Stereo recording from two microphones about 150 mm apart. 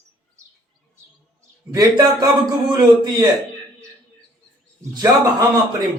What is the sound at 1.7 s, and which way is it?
Speech, 25° right (ahead or behind).